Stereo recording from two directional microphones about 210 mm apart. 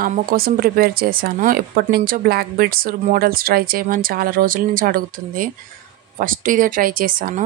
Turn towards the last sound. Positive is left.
turn(degrees=-40)  # may be behind; listen again after turning